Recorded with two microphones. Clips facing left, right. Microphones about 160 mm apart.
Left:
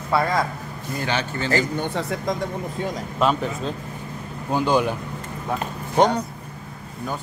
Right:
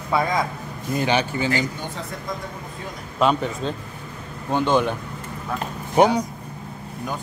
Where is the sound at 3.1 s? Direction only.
Centre (ahead or behind).